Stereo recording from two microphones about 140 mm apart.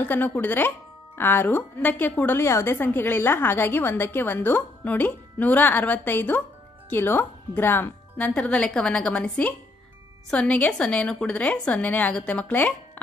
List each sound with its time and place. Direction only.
0.0 s speech: 10° left (ahead or behind)